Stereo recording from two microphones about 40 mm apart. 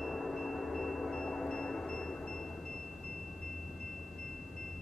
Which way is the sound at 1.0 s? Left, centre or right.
Left.